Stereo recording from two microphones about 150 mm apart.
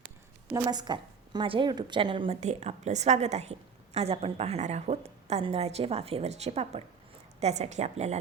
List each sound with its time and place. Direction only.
0.5 s a woman's voice: 25° right (ahead or behind)
2.4 s a woman's voice: 50° right (ahead or behind)